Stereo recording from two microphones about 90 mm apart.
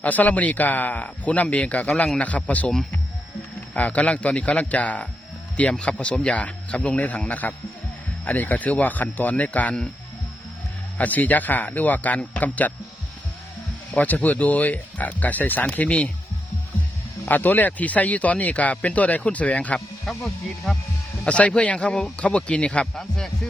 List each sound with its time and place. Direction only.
0.0 s speech: 20° left (ahead or behind)
3.8 s speech: 15° left (ahead or behind)
10.9 s speech: 20° left (ahead or behind)
14.0 s speech: 20° left (ahead or behind)
17.2 s speech: 20° left (ahead or behind)
20.1 s speech: centre (ahead or behind)
21.2 s speech: 15° left (ahead or behind)